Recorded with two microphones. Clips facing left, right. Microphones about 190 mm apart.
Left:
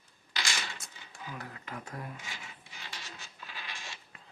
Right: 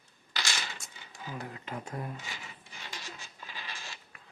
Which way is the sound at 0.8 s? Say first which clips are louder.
Even; centre (ahead or behind).